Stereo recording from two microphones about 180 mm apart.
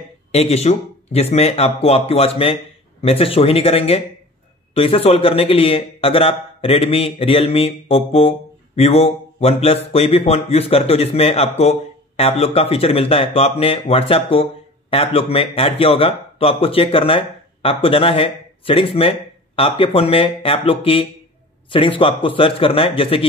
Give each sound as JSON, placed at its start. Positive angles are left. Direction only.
{"t": 0.3, "sound": "a man's voice", "side_deg": 35}